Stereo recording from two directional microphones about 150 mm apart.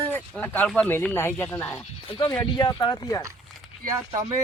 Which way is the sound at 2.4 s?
30° left (ahead or behind).